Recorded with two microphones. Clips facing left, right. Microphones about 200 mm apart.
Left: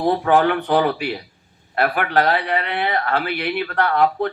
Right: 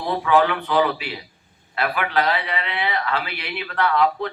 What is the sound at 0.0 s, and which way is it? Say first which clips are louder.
Speech: left 3 dB; 50° left (ahead or behind).